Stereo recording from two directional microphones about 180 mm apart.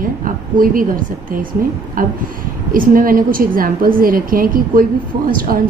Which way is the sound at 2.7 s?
50° right (ahead or behind).